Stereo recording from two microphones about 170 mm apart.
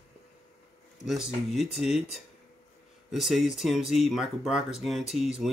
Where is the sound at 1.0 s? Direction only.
Centre (ahead or behind).